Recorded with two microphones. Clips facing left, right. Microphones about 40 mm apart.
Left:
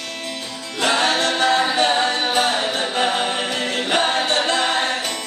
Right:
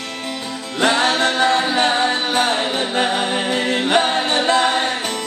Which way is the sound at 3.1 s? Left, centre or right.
Centre.